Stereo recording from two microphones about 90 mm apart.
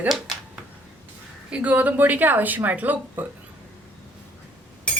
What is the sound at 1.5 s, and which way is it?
A woman's voice, 15° right (ahead or behind).